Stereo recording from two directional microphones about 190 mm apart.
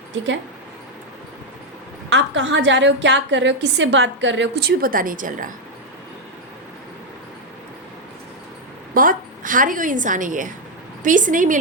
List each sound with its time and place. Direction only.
2.0 s a woman's voice: 70° right (ahead or behind)
4.8 s a woman's voice: 50° right (ahead or behind)
9.0 s a woman's voice: 45° right (ahead or behind)